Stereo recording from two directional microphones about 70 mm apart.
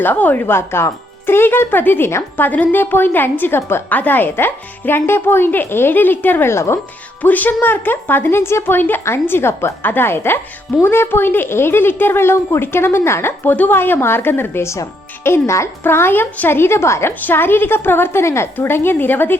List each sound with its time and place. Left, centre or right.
0.0 s a woman's voice: left
2.5 s a woman's voice: left
7.2 s a woman's voice: left